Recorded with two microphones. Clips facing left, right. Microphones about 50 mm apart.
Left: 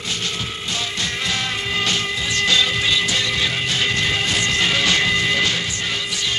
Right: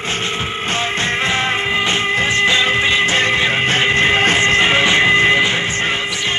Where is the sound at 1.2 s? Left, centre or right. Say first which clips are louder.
Right 5 dB; right.